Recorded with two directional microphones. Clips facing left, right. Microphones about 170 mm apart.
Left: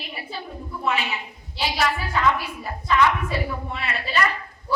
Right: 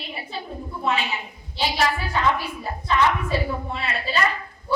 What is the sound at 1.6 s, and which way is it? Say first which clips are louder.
A woman's voice: right 1 dB; 30° right (ahead or behind).